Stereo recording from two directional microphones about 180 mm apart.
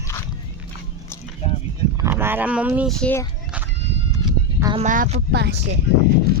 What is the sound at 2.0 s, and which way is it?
Speech, 15° right (ahead or behind).